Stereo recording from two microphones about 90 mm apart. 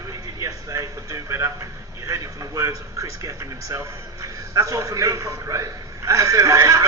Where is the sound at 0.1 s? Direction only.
35° right (ahead or behind).